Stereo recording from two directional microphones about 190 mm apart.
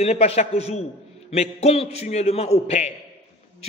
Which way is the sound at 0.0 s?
35° left (ahead or behind).